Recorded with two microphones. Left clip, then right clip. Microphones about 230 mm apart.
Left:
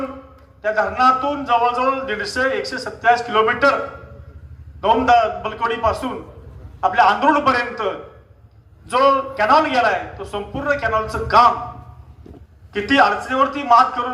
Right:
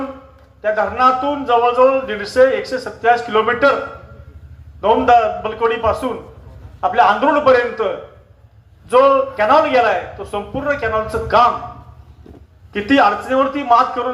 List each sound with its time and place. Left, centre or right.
0.6 s speech: left
4.8 s speech: left
12.7 s speech: left